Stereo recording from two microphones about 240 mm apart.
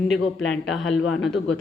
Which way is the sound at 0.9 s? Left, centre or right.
Left.